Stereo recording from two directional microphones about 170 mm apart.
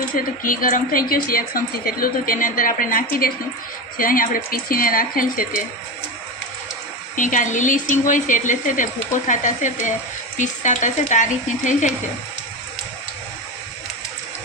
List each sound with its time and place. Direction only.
0.1 s a woman's voice: 55° left (ahead or behind)
7.2 s speech: 50° left (ahead or behind)